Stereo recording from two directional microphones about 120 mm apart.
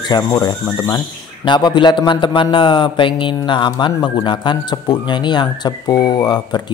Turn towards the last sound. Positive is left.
turn(degrees=35)  # may be behind; listen again after turning